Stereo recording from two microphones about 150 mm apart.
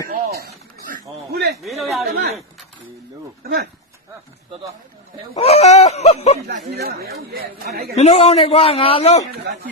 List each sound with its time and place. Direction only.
0.1 s a sound: 85° right
1.6 s speech: centre (ahead or behind)
5.4 s a man's voice: 45° left (ahead or behind)
6.7 s speech: 90° right
7.9 s a man's voice: 45° left (ahead or behind)
9.5 s speech: 90° right